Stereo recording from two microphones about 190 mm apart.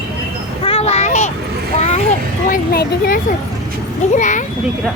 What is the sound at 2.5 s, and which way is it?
Speech, 50° left (ahead or behind).